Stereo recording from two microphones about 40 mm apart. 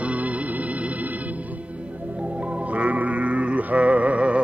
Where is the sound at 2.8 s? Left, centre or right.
Right.